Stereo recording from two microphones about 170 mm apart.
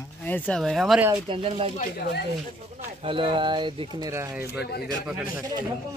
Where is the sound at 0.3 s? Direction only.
5° left (ahead or behind).